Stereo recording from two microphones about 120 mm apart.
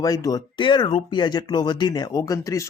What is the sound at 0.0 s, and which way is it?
Speech, 30° left (ahead or behind).